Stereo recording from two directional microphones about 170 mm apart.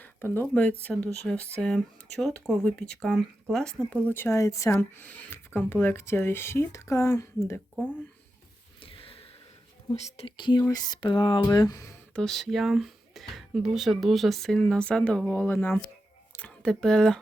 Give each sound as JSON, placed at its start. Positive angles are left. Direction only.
{"t": 0.0, "sound": "a sound", "side_deg": 10}
{"t": 0.4, "sound": "speech", "side_deg": 5}
{"t": 8.8, "sound": "a sound", "side_deg": 30}
{"t": 9.9, "sound": "speech", "side_deg": 40}
{"t": 10.7, "sound": "music", "side_deg": 25}
{"t": 12.1, "sound": "speech", "side_deg": 5}